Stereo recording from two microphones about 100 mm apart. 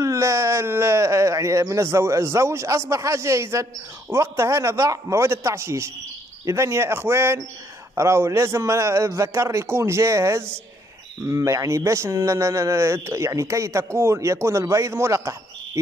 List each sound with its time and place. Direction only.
0.0 s speech: 30° right (ahead or behind)